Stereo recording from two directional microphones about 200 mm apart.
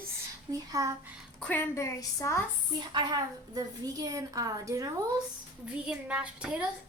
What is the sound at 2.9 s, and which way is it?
A woman's voice, 20° right (ahead or behind).